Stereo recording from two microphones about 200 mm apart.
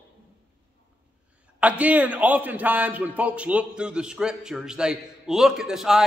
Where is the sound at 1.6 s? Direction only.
5° right (ahead or behind).